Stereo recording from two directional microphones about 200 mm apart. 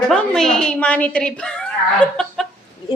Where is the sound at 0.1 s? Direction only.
5° left (ahead or behind).